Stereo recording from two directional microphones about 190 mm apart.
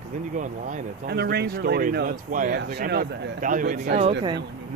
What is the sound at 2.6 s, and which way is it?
Speech, 60° right (ahead or behind).